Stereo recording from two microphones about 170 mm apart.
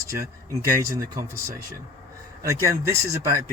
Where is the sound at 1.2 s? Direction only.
20° right (ahead or behind).